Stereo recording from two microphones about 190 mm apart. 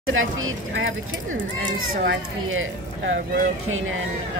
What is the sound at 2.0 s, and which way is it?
Speech, 90° right.